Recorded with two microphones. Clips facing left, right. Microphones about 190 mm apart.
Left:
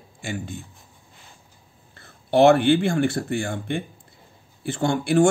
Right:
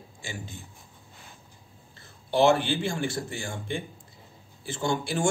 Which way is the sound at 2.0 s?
60° left (ahead or behind).